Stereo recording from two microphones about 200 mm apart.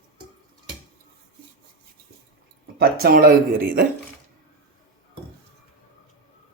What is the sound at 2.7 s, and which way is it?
Speech, 50° right (ahead or behind).